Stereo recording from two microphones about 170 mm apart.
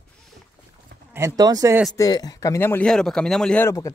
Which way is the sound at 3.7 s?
20° left (ahead or behind).